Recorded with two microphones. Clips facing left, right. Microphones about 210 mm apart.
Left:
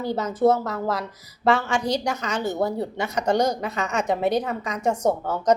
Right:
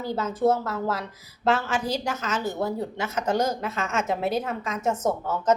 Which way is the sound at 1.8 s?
15° left (ahead or behind).